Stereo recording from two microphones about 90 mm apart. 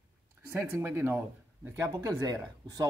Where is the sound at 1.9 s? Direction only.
45° right (ahead or behind).